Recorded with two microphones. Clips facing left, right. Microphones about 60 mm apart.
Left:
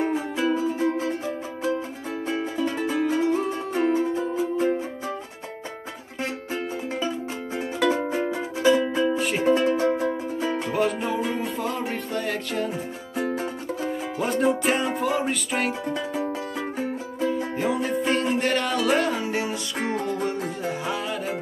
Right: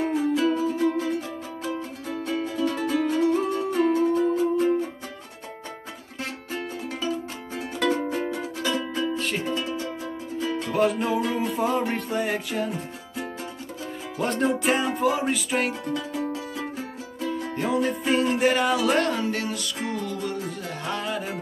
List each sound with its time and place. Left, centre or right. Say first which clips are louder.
0.0 s music: right 2 dB; left
6.5 s music: left 1 dB; centre
9.4 s music: left 8 dB; left
10.4 s music: even; left
10.7 s music: right 4 dB; centre
12.5 s music: left 1 dB; centre
14.1 s music: left 1 dB; centre
15.8 s speech: left 1 dB; left
16.5 s music: left 4 dB; left
17.6 s music: right 3 dB; centre
19.8 s music: left 5 dB; left
20.8 s music: left 1 dB; centre